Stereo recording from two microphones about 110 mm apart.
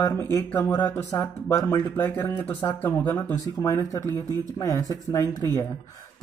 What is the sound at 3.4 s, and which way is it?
Speech, 30° left (ahead or behind).